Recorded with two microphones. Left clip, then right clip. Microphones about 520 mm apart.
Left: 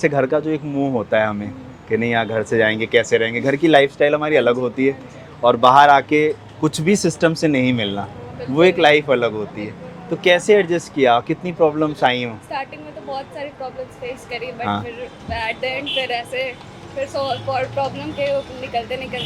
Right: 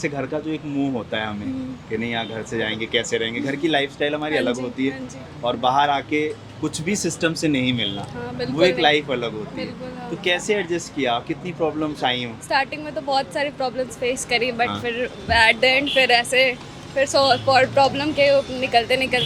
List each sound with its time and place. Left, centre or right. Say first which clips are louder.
0.0 s speech: left 8 dB; left
12.5 s speech: right 5 dB; right